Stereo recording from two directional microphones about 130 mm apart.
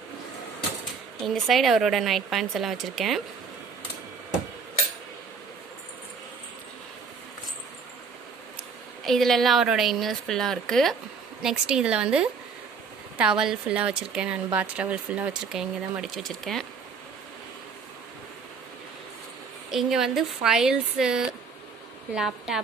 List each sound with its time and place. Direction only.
1.2 s a woman's voice: centre (ahead or behind)
9.0 s a woman's voice: centre (ahead or behind)
19.7 s a woman's voice: 5° right (ahead or behind)